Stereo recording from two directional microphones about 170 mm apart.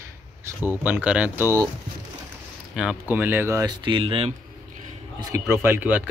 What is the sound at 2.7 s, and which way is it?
Speech, 5° right (ahead or behind).